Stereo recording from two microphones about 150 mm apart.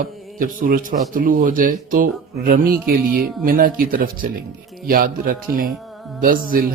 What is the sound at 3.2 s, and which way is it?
A man's voice, 75° right (ahead or behind).